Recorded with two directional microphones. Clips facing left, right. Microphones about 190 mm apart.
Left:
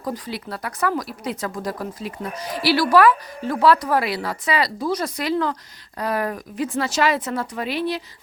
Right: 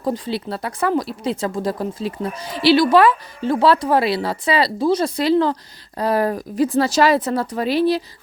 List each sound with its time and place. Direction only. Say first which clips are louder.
0.0 s speech: right 6 dB; 30° right (ahead or behind)